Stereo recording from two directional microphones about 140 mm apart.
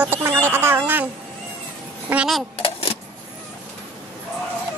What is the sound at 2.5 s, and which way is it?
Vehicle, 40° left (ahead or behind).